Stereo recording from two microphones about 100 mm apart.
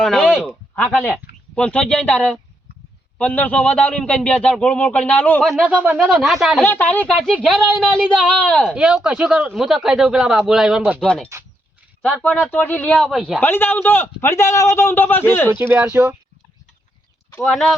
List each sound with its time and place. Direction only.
0.0 s a sound: 5° left (ahead or behind)
1.5 s a man's voice: 10° left (ahead or behind)
5.4 s speech: centre (ahead or behind)
5.6 s speech: 15° right (ahead or behind)
6.1 s speech: centre (ahead or behind)
6.7 s a man's voice: 15° left (ahead or behind)
7.9 s speech: 10° right (ahead or behind)
8.4 s a man's voice: 10° left (ahead or behind)
8.7 s speech: 10° right (ahead or behind)
11.0 s a man's voice: 10° left (ahead or behind)
13.0 s speech: centre (ahead or behind)
13.4 s a man's voice: 20° left (ahead or behind)
15.4 s speech: 20° right (ahead or behind)
17.4 s speech: 5° left (ahead or behind)